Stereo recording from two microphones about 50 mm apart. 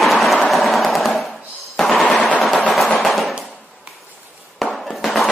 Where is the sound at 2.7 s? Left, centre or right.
Centre.